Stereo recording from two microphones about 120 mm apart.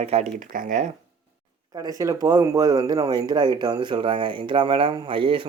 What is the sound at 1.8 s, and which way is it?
Speech, 30° right (ahead or behind).